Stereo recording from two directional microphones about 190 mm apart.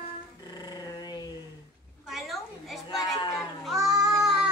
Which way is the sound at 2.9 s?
20° left (ahead or behind).